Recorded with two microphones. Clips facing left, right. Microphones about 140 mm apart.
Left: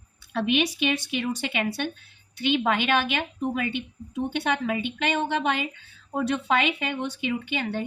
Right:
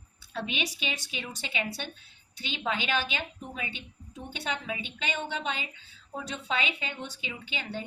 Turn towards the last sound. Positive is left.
turn(degrees=60)  # may be behind; listen again after turning